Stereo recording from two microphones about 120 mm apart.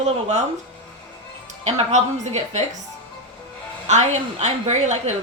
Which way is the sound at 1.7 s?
65° right (ahead or behind).